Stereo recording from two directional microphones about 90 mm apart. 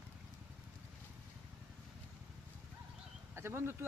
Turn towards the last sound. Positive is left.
turn(degrees=-25)  # may be behind; listen again after turning